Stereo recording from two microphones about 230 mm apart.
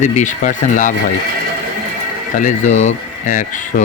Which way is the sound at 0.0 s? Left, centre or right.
Left.